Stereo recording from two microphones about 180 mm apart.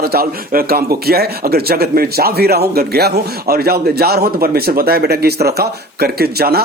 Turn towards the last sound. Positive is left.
turn(degrees=-60)  # may be behind; listen again after turning